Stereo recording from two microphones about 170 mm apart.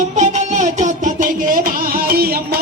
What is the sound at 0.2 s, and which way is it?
Music, 45° right (ahead or behind).